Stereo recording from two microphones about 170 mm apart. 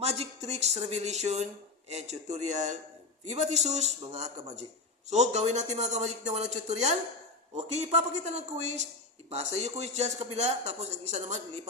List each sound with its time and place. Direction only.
0.0 s a man's voice: 35° right (ahead or behind)